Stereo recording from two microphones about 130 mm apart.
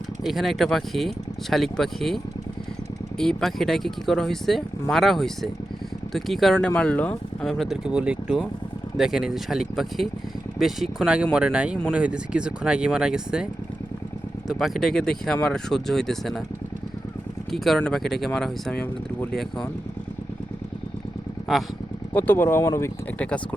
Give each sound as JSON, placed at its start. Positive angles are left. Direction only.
{"t": 0.3, "sound": "speech", "side_deg": 0}
{"t": 7.4, "sound": "speech", "side_deg": 0}
{"t": 17.5, "sound": "speech", "side_deg": 0}
{"t": 22.1, "sound": "speech", "side_deg": 15}
{"t": 23.1, "sound": "speech", "side_deg": 10}